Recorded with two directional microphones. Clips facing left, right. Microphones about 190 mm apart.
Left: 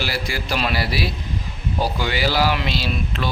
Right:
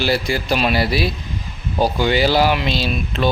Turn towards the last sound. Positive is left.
turn(degrees=-25)  # may be behind; listen again after turning